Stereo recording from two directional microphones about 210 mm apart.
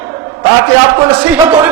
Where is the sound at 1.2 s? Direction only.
5° right (ahead or behind).